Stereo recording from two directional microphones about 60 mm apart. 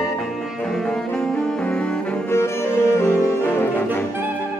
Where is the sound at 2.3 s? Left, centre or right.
Left.